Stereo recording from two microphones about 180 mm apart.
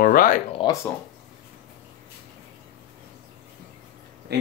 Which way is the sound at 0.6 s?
30° left (ahead or behind).